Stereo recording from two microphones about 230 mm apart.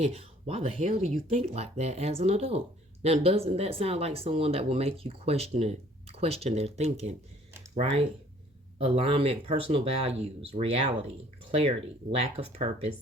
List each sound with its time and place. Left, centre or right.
0.0 s speech: right
12.2 s speech: right